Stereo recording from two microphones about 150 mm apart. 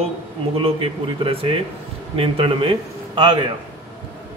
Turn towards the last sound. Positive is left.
turn(degrees=-30)  # may be behind; listen again after turning